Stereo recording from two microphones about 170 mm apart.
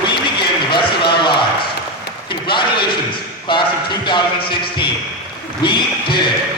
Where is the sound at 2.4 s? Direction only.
30° left (ahead or behind).